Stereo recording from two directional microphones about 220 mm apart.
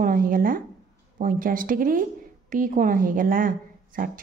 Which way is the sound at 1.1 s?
40° right (ahead or behind).